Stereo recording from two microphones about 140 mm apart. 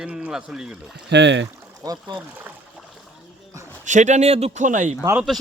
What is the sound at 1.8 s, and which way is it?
Speech, 30° right (ahead or behind).